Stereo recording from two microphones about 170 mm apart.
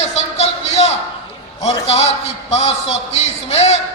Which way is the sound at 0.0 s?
40° left (ahead or behind).